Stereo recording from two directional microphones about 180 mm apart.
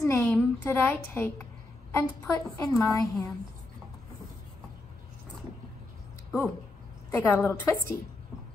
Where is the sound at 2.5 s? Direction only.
20° left (ahead or behind).